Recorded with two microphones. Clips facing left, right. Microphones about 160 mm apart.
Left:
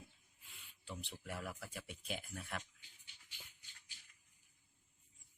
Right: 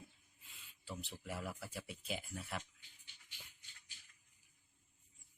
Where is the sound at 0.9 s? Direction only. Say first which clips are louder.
Right 1 dB; 5° right (ahead or behind).